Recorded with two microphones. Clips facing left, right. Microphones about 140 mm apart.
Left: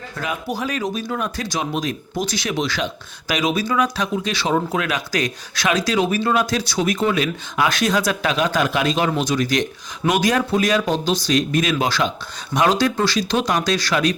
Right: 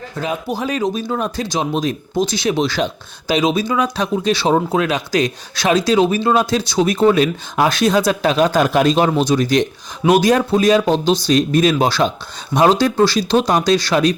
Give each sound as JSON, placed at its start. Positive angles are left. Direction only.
{"t": 0.2, "sound": "speech", "side_deg": -25}